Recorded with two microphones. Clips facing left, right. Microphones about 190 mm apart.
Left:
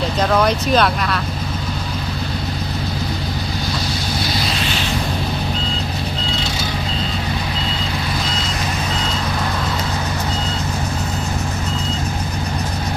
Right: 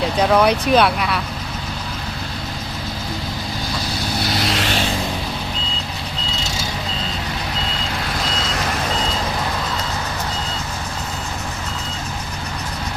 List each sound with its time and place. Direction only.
0.2 s speech: 10° right (ahead or behind)
4.4 s vehicle: 80° right